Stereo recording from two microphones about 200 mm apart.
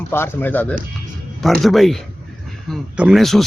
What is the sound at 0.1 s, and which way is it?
Speech, 10° left (ahead or behind).